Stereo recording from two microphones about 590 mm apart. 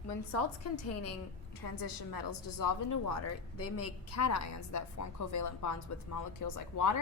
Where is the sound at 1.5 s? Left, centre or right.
Left.